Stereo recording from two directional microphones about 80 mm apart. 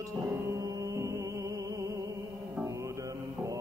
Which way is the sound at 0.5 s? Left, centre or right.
Right.